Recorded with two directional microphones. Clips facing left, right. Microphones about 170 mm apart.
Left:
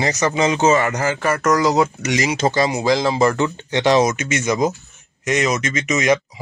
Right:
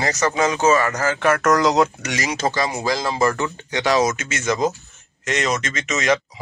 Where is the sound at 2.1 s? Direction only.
15° left (ahead or behind).